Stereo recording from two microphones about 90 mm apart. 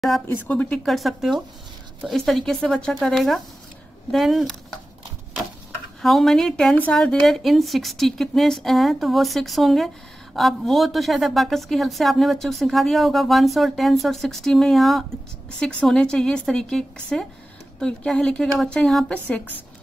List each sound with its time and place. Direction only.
0.4 s a woman's voice: 15° left (ahead or behind)
0.8 s a woman's voice: centre (ahead or behind)
6.0 s a woman's voice: centre (ahead or behind)